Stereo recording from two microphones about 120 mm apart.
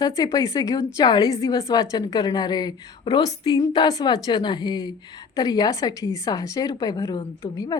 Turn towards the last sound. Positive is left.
turn(degrees=35)  # may be behind; listen again after turning